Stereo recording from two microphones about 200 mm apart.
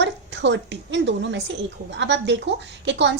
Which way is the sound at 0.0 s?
60° right (ahead or behind).